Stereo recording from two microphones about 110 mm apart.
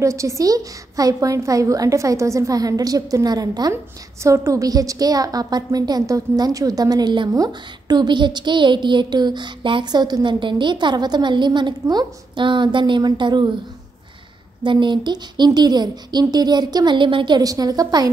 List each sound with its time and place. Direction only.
0.0 s a woman's voice: 30° right (ahead or behind)
14.6 s a woman's voice: 45° right (ahead or behind)